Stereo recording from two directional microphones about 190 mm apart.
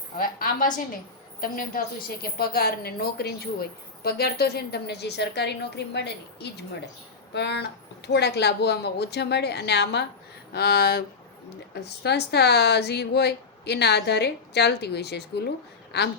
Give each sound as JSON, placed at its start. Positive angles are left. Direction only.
{"t": 0.2, "sound": "a woman's voice", "side_deg": 45}